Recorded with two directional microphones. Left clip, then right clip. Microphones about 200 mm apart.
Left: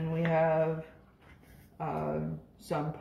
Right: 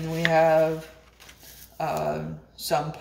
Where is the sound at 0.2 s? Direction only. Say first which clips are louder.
Right 8 dB; 55° right (ahead or behind).